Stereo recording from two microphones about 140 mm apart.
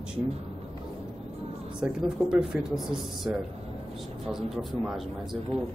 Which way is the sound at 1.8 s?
5° right (ahead or behind).